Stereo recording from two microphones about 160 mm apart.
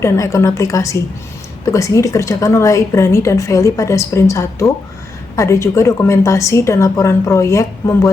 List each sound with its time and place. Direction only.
0.0 s a woman's voice: 20° left (ahead or behind)